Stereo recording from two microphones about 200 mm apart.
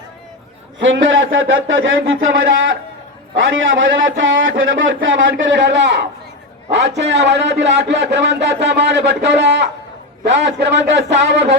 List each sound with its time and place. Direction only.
0.8 s a man's voice: 70° right (ahead or behind)